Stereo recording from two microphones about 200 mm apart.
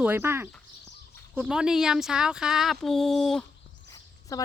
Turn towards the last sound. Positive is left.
turn(degrees=15)  # may be behind; listen again after turning